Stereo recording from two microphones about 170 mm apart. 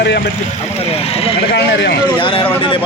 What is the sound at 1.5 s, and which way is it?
Speech, 90° left.